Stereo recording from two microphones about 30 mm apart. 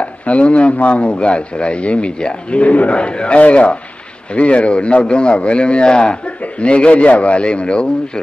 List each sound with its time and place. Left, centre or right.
0.0 s speech: left
2.6 s a man's voice: left
3.0 s speech: left
6.6 s a man's voice: left